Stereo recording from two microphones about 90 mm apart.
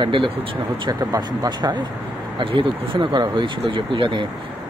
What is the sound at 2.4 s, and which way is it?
Speech, 75° right (ahead or behind).